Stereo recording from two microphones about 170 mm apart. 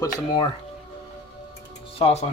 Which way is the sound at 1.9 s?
35° left (ahead or behind).